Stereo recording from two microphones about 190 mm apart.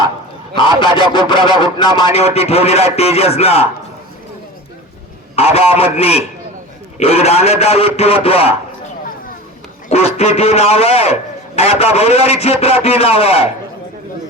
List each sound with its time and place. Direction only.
0.5 s speech: 25° left (ahead or behind)
2.1 s a man's voice: 35° left (ahead or behind)
5.4 s a man's voice: 30° left (ahead or behind)
9.9 s a man's voice: 35° left (ahead or behind)